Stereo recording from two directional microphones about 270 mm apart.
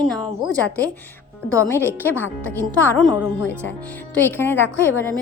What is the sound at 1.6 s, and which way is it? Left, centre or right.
Speech, centre.